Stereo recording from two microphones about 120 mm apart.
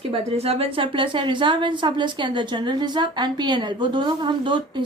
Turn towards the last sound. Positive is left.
turn(degrees=-40)  # may be behind; listen again after turning